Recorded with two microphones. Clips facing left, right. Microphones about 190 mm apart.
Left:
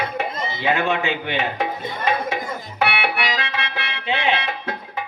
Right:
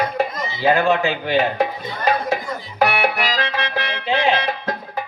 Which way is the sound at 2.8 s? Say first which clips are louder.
Right 4 dB; 40° right (ahead or behind).